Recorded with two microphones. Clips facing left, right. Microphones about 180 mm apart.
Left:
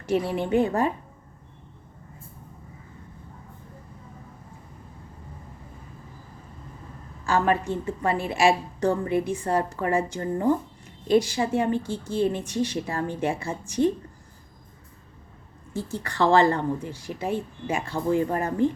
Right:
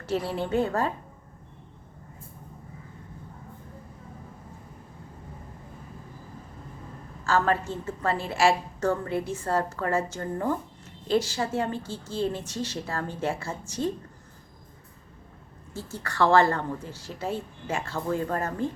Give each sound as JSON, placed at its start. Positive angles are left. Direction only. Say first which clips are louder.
{"t": 0.0, "sound": "a woman's voice", "louder": "left 4 dB", "side_deg": 15}
{"t": 7.3, "sound": "a woman's voice", "louder": "left 2 dB", "side_deg": 15}
{"t": 15.7, "sound": "a woman's voice", "louder": "left 5 dB", "side_deg": 15}